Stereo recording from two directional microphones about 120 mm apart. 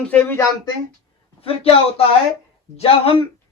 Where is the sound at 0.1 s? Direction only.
10° left (ahead or behind).